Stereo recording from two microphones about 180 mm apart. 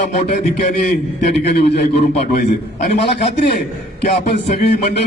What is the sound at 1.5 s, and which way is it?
A man's voice, 65° left (ahead or behind).